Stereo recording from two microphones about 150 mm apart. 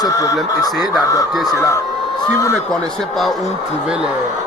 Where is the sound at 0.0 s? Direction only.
20° left (ahead or behind).